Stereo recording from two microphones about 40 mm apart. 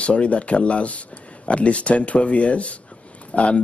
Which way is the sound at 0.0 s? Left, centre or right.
Left.